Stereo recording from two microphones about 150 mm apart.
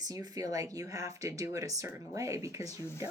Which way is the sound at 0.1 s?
25° right (ahead or behind).